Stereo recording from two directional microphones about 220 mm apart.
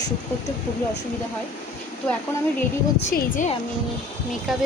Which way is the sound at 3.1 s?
35° left (ahead or behind).